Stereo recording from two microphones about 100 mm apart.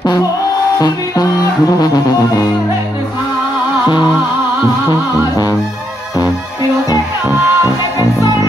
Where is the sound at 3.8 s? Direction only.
45° left (ahead or behind).